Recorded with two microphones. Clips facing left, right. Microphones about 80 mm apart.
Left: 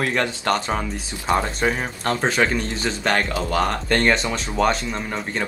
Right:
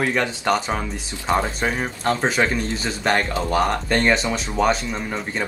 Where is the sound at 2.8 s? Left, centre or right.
Right.